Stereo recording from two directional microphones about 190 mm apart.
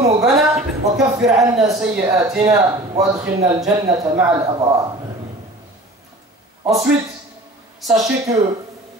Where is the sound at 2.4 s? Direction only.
20° right (ahead or behind).